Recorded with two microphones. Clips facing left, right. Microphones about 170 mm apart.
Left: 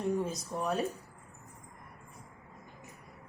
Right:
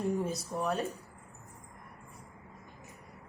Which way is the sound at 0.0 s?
Centre (ahead or behind).